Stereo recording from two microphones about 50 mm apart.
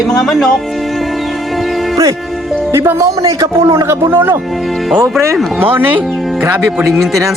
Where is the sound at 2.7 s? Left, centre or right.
Right.